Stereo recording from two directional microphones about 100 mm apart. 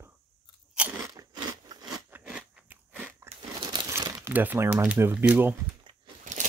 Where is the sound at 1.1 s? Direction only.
45° right (ahead or behind).